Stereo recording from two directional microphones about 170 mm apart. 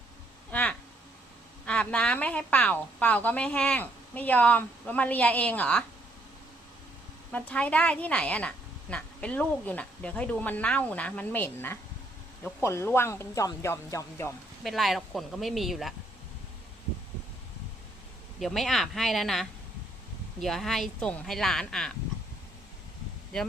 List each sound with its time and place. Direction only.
0.5 s a sound: 5° left (ahead or behind)
1.6 s a woman's voice: 5° left (ahead or behind)
7.3 s a woman's voice: 10° left (ahead or behind)
14.6 s speech: centre (ahead or behind)
18.3 s speech: centre (ahead or behind)